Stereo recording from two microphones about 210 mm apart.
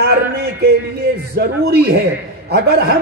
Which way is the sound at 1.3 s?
50° right (ahead or behind).